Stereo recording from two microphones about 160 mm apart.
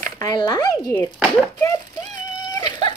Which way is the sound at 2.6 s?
25° left (ahead or behind).